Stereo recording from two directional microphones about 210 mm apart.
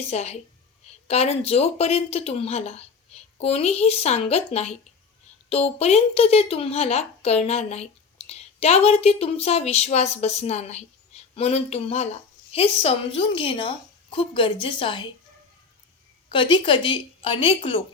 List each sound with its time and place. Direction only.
0.0 s a woman's voice: 30° left (ahead or behind)
16.3 s speech: 25° left (ahead or behind)